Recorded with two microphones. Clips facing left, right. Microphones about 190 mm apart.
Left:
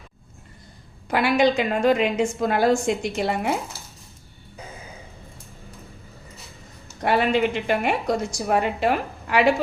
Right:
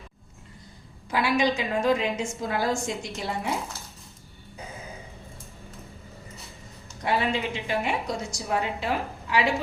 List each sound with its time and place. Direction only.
1.1 s a woman's voice: 60° left (ahead or behind)
7.0 s a woman's voice: 60° left (ahead or behind)